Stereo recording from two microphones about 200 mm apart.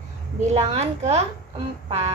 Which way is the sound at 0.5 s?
35° right (ahead or behind).